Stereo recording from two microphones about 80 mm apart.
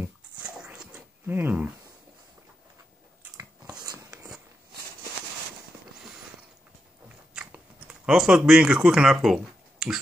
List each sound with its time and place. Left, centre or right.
1.2 s speech: right
7.3 s chewing: centre